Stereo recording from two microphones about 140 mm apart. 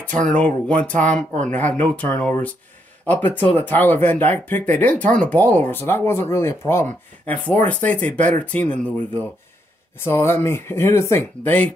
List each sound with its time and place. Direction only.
0.3 s speech: 10° left (ahead or behind)
5.0 s speech: 65° right (ahead or behind)
5.3 s speech: 10° left (ahead or behind)